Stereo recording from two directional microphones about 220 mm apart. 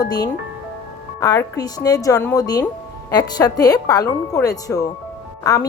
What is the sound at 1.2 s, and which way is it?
Speech, 15° left (ahead or behind).